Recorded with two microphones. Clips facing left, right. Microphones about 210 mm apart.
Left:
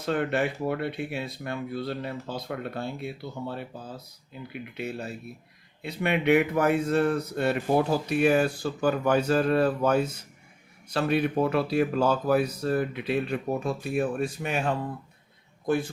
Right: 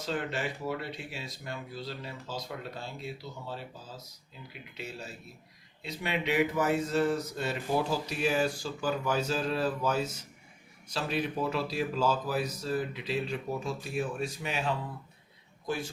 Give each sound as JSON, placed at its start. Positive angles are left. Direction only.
{"t": 0.0, "sound": "a man's voice", "side_deg": 60}